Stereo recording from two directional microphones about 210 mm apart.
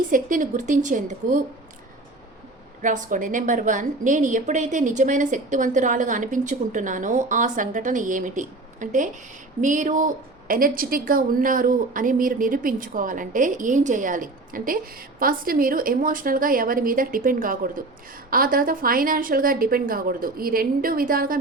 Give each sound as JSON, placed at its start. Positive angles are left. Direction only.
{"t": 0.1, "sound": "a woman's voice", "side_deg": -40}
{"t": 2.8, "sound": "a woman's voice", "side_deg": -40}